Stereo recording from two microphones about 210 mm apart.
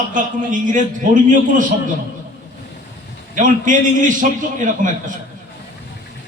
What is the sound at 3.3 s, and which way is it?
A man's voice, 40° right (ahead or behind).